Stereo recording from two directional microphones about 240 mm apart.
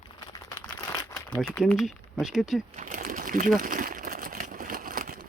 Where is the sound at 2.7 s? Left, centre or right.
Right.